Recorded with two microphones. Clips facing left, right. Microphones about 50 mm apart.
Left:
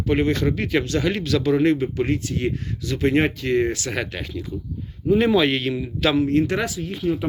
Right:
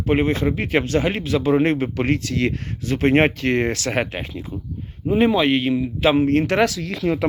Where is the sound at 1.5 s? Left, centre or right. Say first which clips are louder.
Right 1 dB; right.